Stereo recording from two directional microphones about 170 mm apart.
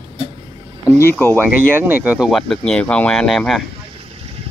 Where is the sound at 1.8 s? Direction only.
10° right (ahead or behind).